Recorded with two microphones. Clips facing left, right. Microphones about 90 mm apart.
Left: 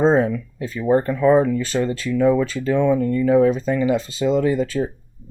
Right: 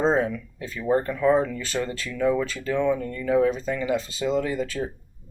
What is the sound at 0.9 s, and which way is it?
Speech, 35° left (ahead or behind).